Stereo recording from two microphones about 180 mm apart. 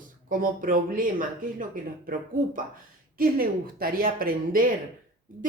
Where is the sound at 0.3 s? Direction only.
50° right (ahead or behind).